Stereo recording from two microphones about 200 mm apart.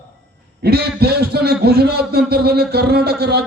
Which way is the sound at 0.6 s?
50° right (ahead or behind).